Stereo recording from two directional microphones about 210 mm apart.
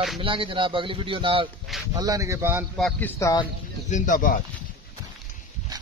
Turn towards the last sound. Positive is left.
turn(degrees=35)  # may be behind; listen again after turning